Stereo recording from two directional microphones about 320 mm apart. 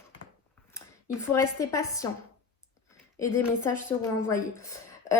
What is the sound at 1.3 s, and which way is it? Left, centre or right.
Speech, centre.